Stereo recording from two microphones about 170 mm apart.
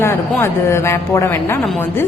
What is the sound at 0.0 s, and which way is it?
A woman's voice, 15° left (ahead or behind).